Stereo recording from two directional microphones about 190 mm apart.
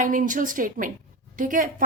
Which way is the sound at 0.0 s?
45° right (ahead or behind).